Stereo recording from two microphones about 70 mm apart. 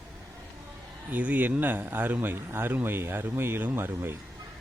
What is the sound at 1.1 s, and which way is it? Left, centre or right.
A man's voice, right.